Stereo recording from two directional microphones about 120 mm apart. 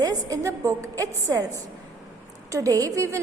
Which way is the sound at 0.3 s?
25° right (ahead or behind).